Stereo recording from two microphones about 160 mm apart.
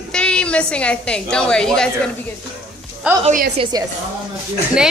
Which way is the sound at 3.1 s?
10° right (ahead or behind).